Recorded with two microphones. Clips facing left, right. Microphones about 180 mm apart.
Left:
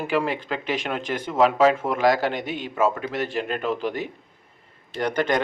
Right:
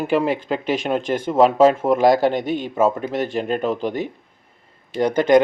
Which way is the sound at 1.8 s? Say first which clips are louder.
Right 6 dB; 45° right (ahead or behind).